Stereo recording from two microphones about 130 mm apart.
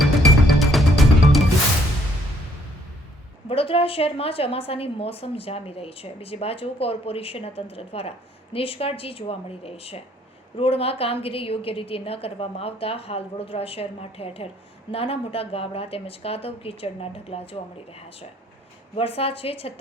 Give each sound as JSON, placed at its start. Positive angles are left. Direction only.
{"t": 0.0, "sound": "music", "side_deg": 0}
{"t": 3.5, "sound": "a woman's voice", "side_deg": 45}
{"t": 18.9, "sound": "a woman's voice", "side_deg": 45}